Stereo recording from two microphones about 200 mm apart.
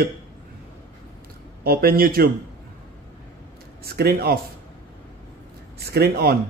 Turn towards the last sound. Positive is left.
turn(degrees=-50)  # may be behind; listen again after turning